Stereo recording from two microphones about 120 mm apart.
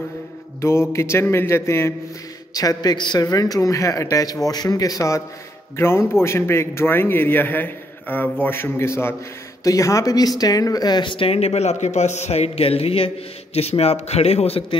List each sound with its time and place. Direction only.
0.6 s music: 20° left (ahead or behind)
2.5 s speech: 30° left (ahead or behind)
5.8 s music: 20° left (ahead or behind)
6.2 s a man's voice: 20° left (ahead or behind); by 14.8 s 55° left (ahead or behind)